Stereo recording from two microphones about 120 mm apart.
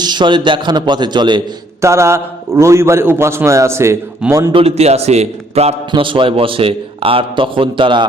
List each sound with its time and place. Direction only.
0.0 s a man's voice: 40° right (ahead or behind)
1.8 s a man's voice: 25° right (ahead or behind)
4.5 s a man's voice: 60° right (ahead or behind)
5.9 s a man's voice: 45° right (ahead or behind)